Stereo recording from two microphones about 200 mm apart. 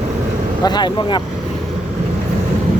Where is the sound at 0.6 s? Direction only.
20° left (ahead or behind).